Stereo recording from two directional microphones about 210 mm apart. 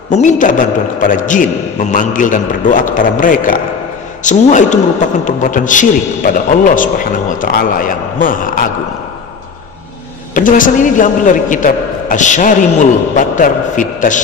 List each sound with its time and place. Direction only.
0.1 s a man's voice: 35° left (ahead or behind)
10.3 s a man's voice: 40° left (ahead or behind)